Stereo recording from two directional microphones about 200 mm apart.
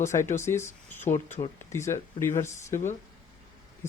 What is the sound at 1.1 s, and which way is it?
Speech, 35° left (ahead or behind).